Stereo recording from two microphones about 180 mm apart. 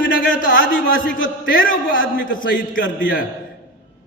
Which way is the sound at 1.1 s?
50° left (ahead or behind).